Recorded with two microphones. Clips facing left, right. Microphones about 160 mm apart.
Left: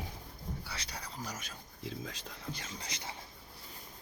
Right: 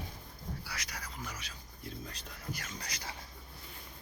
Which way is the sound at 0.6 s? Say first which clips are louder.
Even; 30° left (ahead or behind).